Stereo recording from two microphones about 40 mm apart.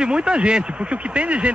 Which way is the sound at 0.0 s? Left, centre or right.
Right.